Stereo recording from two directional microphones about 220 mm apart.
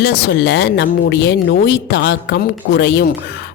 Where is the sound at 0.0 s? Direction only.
50° left (ahead or behind).